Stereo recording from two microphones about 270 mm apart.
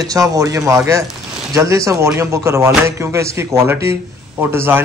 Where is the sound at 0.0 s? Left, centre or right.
Centre.